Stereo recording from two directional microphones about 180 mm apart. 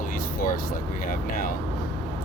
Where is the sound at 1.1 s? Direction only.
50° left (ahead or behind).